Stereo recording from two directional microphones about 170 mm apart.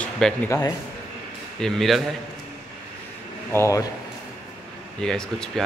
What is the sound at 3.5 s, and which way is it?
Speech, 15° left (ahead or behind).